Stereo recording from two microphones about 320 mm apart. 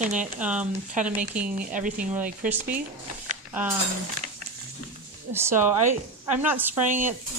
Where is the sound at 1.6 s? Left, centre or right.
Right.